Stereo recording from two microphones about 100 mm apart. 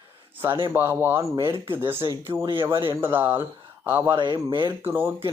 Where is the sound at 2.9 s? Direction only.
20° right (ahead or behind).